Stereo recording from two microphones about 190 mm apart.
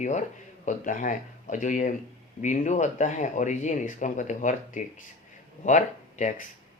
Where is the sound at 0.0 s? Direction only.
40° left (ahead or behind).